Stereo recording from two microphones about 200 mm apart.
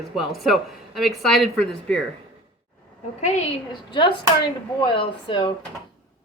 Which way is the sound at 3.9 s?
25° left (ahead or behind).